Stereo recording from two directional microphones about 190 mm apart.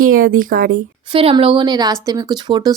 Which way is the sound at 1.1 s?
30° right (ahead or behind).